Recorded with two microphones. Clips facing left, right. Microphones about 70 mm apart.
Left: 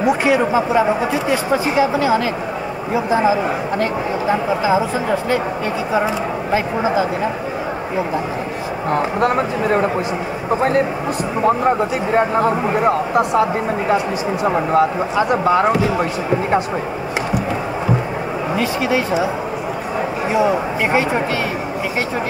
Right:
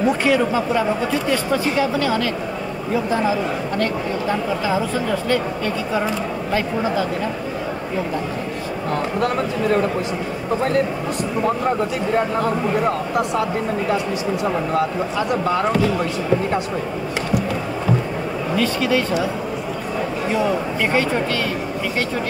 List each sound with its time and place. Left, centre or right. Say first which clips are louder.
0.0 s speech: left 2 dB; centre
6.5 s speech: left 3 dB; centre
8.9 s speech: left 4 dB; left
14.5 s speech: left 5 dB; left
18.6 s speech: even; centre
20.3 s speech: left 4 dB; centre